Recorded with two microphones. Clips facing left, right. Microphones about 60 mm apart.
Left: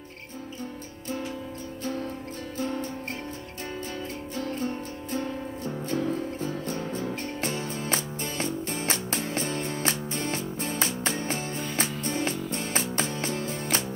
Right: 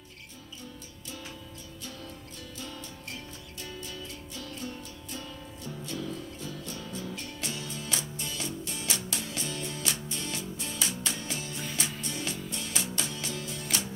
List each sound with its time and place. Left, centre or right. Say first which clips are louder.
2.5 s music: left 12 dB; left
4.4 s music: left 9 dB; left